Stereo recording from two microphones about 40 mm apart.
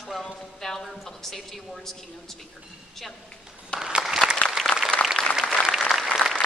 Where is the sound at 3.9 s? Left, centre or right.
Right.